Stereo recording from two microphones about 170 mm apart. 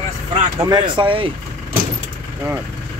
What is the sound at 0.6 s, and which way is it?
Speech, 25° right (ahead or behind).